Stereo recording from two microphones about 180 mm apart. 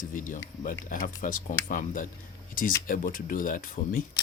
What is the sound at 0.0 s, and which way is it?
Speech, 50° left (ahead or behind).